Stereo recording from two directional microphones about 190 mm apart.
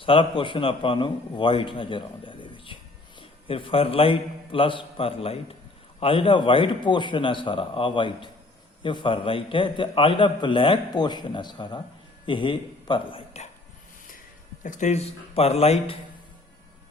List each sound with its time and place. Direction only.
0.0 s a man's voice: 30° left (ahead or behind)
14.6 s speech: 40° left (ahead or behind)